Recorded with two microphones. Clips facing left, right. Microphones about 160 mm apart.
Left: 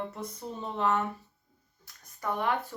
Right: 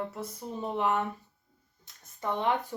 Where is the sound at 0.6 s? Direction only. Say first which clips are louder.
Even; 15° right (ahead or behind).